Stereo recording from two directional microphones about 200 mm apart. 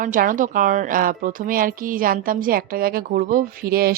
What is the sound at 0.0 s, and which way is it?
A woman's voice, 40° right (ahead or behind).